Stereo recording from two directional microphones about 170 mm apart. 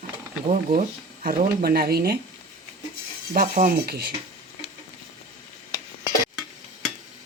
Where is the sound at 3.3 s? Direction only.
55° right (ahead or behind).